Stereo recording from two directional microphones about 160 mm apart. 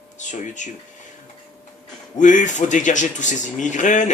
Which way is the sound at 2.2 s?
50° left (ahead or behind).